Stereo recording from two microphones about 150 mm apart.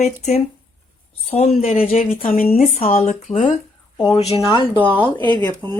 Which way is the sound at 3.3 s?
55° left (ahead or behind).